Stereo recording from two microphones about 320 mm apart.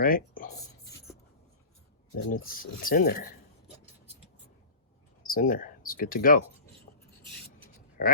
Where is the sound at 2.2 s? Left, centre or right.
Left.